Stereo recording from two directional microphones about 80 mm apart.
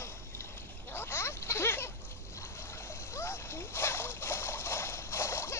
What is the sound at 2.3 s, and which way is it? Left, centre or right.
Splash, left.